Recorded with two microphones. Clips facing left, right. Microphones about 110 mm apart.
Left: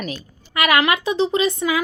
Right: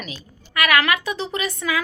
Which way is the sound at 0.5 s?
25° left (ahead or behind).